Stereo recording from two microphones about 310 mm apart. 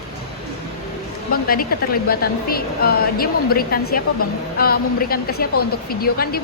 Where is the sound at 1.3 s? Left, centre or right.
Left.